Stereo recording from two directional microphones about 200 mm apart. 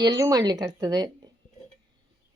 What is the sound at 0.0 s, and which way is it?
Speech, 20° right (ahead or behind).